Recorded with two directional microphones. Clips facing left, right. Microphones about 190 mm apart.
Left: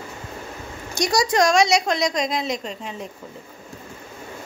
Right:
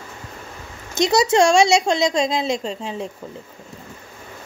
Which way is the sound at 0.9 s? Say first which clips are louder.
Right 4 dB; 20° right (ahead or behind).